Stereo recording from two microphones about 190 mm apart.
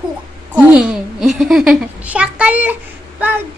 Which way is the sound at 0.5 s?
5° right (ahead or behind).